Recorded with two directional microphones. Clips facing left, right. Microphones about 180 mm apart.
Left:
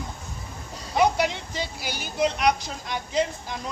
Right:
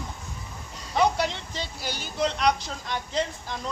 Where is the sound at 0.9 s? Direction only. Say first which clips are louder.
Left 2 dB; 15° left (ahead or behind).